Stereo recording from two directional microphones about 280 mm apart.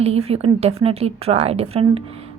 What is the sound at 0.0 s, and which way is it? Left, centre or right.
A woman's voice, right.